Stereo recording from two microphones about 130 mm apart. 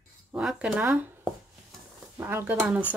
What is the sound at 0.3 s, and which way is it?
Speech, 5° right (ahead or behind).